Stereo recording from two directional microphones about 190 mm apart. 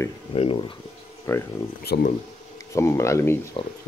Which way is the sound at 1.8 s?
55° left (ahead or behind).